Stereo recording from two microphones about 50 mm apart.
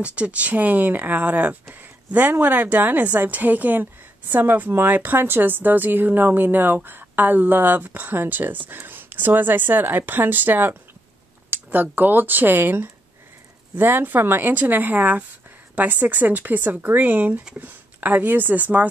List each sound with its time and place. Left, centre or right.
0.0 s a woman's voice: right